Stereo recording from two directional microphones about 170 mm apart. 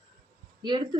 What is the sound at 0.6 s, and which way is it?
Speech, 25° right (ahead or behind).